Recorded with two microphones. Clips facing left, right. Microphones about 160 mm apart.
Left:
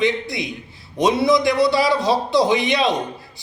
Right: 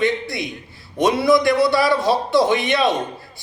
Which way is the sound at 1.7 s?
20° left (ahead or behind).